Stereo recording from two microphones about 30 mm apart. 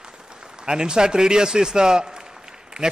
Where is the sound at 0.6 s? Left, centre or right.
Right.